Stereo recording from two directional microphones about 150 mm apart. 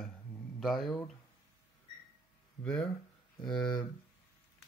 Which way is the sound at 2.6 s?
5° left (ahead or behind).